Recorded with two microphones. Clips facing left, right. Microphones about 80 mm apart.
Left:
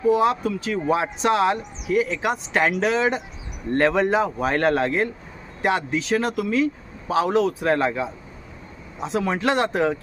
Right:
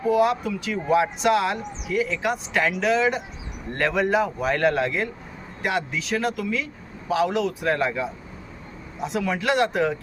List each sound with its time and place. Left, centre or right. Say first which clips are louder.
0.2 s speech: even; left